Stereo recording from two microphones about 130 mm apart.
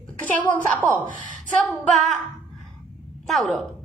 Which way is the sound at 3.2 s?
Centre (ahead or behind).